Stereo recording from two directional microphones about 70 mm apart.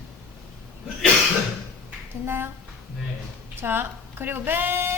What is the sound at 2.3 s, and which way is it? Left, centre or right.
Speech, right.